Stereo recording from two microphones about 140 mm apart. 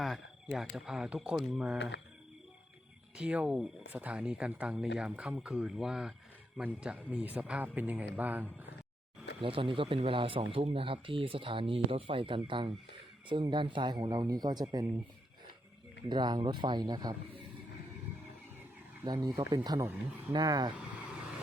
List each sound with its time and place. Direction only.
0.0 s speech: centre (ahead or behind)
3.2 s speech: 10° right (ahead or behind)
9.4 s speech: 40° right (ahead or behind)
16.0 s speech: 30° right (ahead or behind)
19.0 s speech: 30° right (ahead or behind)
20.7 s vehicle: 5° right (ahead or behind)